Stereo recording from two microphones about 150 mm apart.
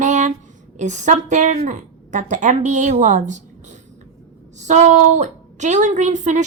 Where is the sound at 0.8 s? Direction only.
55° right (ahead or behind).